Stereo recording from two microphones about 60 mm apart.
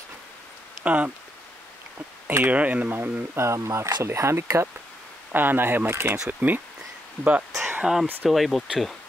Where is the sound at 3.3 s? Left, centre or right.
Right.